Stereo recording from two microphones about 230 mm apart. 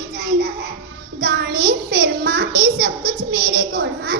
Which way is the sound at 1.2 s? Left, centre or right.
Right.